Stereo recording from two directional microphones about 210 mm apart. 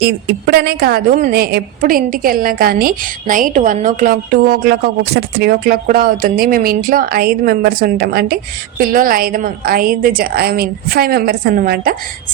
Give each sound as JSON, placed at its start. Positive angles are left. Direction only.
{"t": 0.0, "sound": "a woman's voice", "side_deg": -50}